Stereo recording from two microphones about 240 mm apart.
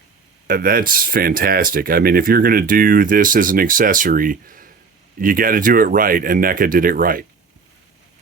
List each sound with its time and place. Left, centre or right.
0.4 s speech: right